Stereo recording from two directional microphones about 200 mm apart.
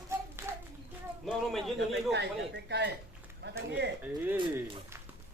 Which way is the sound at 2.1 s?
60° right (ahead or behind).